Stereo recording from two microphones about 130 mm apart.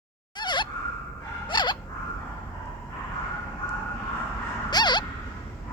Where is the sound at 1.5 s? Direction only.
35° left (ahead or behind).